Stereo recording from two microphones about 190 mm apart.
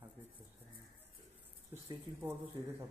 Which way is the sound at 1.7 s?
15° right (ahead or behind).